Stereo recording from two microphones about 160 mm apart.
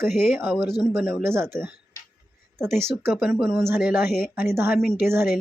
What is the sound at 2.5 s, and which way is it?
Speech, 5° left (ahead or behind).